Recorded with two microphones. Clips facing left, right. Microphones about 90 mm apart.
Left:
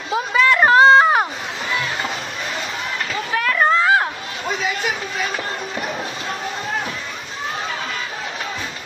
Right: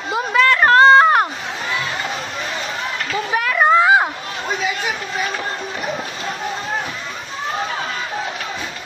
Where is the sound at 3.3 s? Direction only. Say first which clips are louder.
Right 3 dB; 10° right (ahead or behind).